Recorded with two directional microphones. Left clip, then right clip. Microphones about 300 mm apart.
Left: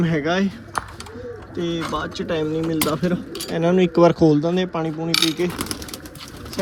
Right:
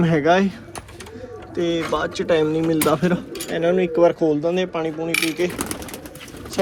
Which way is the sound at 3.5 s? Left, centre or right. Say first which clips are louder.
Even; centre.